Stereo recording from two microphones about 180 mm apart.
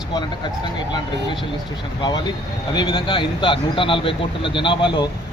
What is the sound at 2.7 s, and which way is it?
Speech, 25° left (ahead or behind).